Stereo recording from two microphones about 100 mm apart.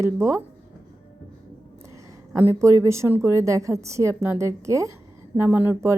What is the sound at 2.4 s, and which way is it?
A woman's voice, 30° right (ahead or behind).